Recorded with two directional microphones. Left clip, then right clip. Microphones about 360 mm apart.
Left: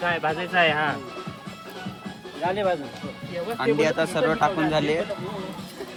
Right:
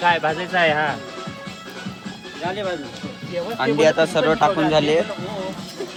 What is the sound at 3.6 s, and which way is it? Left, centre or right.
Speech, centre.